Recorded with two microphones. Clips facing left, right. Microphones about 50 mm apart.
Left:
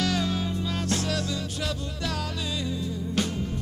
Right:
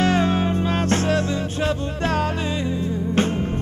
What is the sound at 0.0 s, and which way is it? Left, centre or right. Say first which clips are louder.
Music: right 8 dB; right.